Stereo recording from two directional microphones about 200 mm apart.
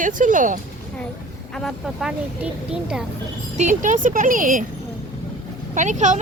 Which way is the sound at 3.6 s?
40° right (ahead or behind).